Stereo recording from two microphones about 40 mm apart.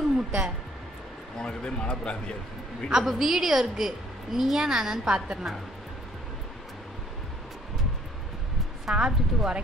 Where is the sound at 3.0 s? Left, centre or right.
Centre.